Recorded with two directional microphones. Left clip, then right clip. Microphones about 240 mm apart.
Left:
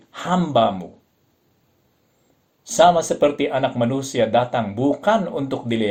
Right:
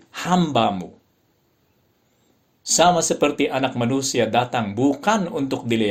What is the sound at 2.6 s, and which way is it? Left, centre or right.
Speech, right.